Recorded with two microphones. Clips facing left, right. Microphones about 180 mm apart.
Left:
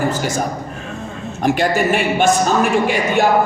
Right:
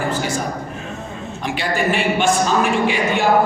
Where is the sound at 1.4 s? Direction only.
45° left (ahead or behind).